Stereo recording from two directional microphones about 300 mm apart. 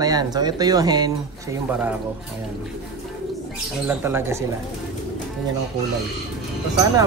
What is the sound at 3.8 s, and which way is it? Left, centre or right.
Speech, centre.